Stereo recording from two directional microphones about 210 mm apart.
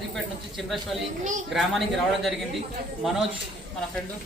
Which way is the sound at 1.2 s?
35° right (ahead or behind).